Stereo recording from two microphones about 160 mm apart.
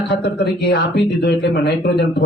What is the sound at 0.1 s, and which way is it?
Speech, 90° left.